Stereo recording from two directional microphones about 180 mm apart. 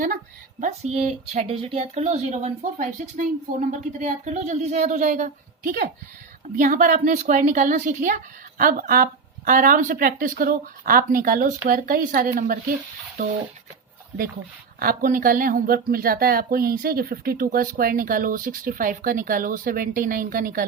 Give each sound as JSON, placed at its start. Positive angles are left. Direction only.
{"t": 0.6, "sound": "speech", "side_deg": -35}
{"t": 14.8, "sound": "speech", "side_deg": -50}